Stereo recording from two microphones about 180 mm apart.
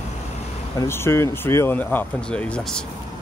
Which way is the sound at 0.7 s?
15° left (ahead or behind).